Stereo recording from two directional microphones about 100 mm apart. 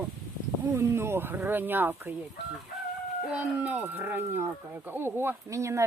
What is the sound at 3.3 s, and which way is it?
Speech, 15° right (ahead or behind).